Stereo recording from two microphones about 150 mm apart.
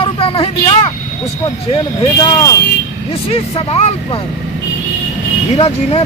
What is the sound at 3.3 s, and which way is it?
Speech, 40° left (ahead or behind).